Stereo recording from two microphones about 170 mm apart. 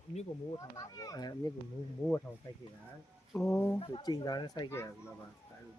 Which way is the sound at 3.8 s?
30° left (ahead or behind).